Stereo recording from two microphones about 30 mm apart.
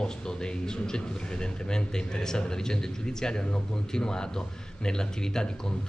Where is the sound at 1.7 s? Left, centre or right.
Left.